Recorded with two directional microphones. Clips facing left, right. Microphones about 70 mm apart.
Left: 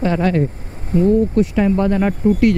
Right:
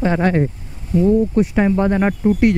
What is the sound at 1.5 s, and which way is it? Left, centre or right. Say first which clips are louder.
Speech: right 1 dB; right.